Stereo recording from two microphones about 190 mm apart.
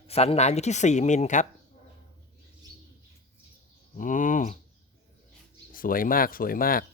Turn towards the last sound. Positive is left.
turn(degrees=50)  # may be behind; listen again after turning